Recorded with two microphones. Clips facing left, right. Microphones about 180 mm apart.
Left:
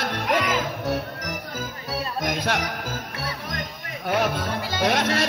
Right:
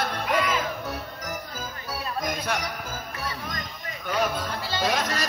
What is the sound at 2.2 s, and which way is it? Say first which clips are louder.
Music: left 4 dB; 90° left.